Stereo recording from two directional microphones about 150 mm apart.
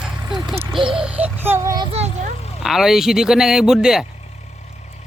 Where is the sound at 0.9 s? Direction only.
5° right (ahead or behind).